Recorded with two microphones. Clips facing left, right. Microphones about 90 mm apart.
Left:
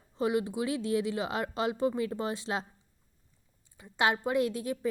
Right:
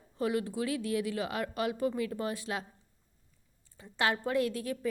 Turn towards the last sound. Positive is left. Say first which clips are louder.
# left 2 dB
turn(degrees=20)  # may be behind; listen again after turning